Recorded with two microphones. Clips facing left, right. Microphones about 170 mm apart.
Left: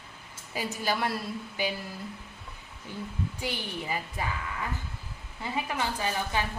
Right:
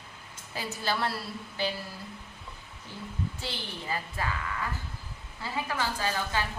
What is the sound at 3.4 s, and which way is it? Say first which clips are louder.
Speech: left 3 dB; 15° left (ahead or behind).